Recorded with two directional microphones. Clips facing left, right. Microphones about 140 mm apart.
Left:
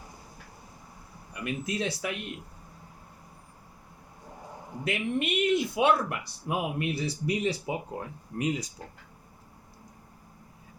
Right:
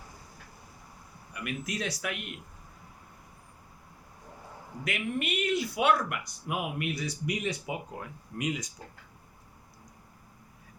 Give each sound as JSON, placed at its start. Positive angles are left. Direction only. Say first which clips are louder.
{"t": 1.3, "sound": "speech", "louder": "left 3 dB", "side_deg": 30}
{"t": 4.8, "sound": "speech", "louder": "left 3 dB", "side_deg": 25}